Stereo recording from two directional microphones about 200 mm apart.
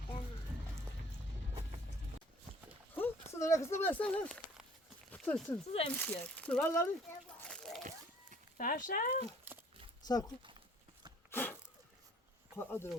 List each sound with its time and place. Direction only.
2.9 s a sound: 10° left (ahead or behind)
5.1 s speech: 5° left (ahead or behind)
5.6 s speech: 30° left (ahead or behind)
6.0 s speech: 5° left (ahead or behind)
7.4 s a sound: 5° left (ahead or behind)
8.5 s speech: 40° left (ahead or behind)
10.1 s speech: 20° left (ahead or behind)
11.3 s a sound: 10° left (ahead or behind)
12.5 s speech: 10° left (ahead or behind)